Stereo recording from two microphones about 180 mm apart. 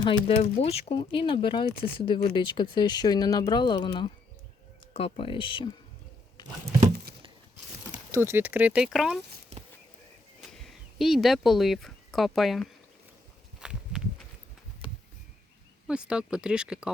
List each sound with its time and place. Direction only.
0.0 s speech: 30° left (ahead or behind)
8.1 s speech: 15° right (ahead or behind)
9.5 s a sound: 35° right (ahead or behind)
10.6 s speech: centre (ahead or behind)
13.6 s walk: 5° right (ahead or behind)
15.9 s speech: 5° right (ahead or behind)